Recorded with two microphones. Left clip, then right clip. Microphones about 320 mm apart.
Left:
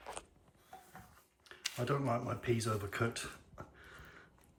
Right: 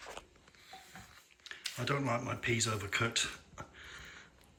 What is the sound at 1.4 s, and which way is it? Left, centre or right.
Speech, centre.